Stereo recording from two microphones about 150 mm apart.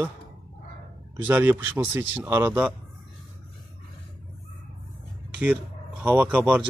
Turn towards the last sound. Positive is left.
turn(degrees=-10)  # may be behind; listen again after turning